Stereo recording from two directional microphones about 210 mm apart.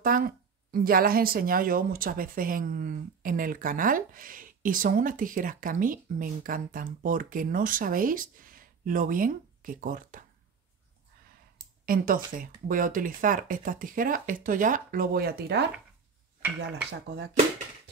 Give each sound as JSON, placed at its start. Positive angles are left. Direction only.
{"t": 0.0, "sound": "speech", "side_deg": -45}
{"t": 11.8, "sound": "speech", "side_deg": -40}